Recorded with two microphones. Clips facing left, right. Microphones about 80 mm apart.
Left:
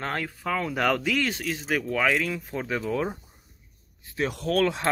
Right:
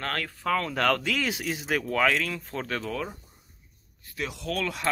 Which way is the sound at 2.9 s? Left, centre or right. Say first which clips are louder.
Left 5 dB; left.